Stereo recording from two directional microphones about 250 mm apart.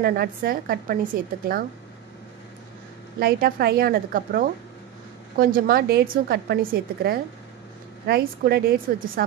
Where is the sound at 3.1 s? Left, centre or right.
Right.